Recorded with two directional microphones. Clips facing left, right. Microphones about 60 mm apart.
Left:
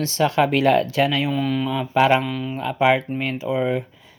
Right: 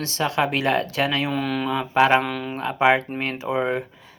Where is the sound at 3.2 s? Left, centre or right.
Right.